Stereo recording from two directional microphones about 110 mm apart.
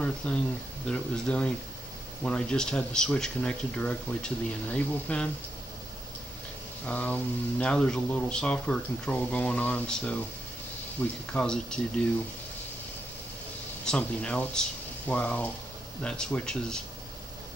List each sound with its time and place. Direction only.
0.0 s speech: 10° left (ahead or behind)
6.9 s speech: 10° left (ahead or behind)
11.3 s speech: 5° left (ahead or behind)
13.8 s speech: 10° left (ahead or behind)